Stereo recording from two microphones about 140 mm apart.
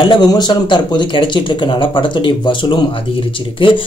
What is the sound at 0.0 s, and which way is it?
Speech, 30° left (ahead or behind).